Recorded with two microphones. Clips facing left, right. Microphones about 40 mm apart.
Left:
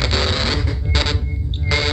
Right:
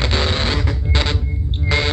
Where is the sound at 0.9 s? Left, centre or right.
Right.